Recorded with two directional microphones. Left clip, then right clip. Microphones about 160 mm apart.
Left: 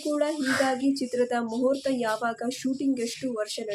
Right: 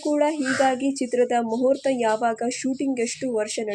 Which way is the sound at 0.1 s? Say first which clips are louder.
Right 4 dB; 20° right (ahead or behind).